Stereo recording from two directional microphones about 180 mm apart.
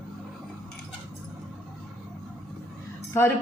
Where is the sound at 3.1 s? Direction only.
15° left (ahead or behind).